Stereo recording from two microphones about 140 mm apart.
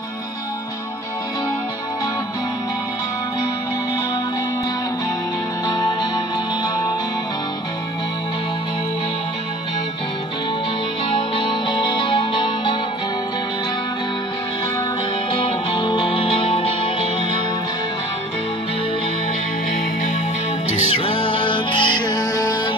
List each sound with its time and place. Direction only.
5.7 s music: 30° left (ahead or behind)
11.1 s music: 35° left (ahead or behind)
15.3 s music: 35° left (ahead or behind)
21.0 s music: 40° left (ahead or behind)